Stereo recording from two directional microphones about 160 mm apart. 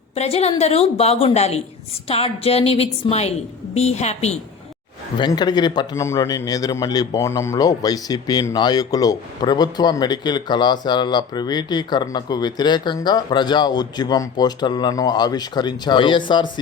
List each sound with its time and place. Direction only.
0.1 s a woman's voice: 40° left (ahead or behind)
5.1 s a man's voice: 25° left (ahead or behind)